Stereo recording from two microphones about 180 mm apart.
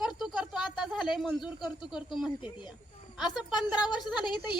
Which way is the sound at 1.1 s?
Centre (ahead or behind).